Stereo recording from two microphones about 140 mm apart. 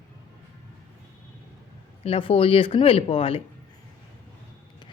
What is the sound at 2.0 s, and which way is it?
Speech, 40° left (ahead or behind).